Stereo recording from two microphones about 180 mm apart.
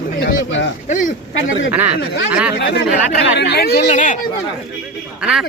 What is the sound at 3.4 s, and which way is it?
Speech, 65° left (ahead or behind).